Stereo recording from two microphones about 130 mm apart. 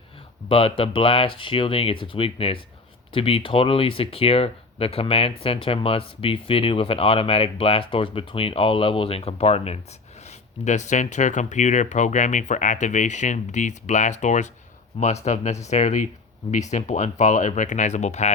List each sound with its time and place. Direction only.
0.4 s speech: 45° left (ahead or behind)
10.6 s speech: 65° left (ahead or behind)